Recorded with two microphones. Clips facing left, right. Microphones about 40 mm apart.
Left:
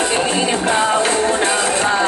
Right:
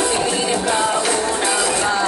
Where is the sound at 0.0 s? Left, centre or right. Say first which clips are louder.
Left 2 dB; left.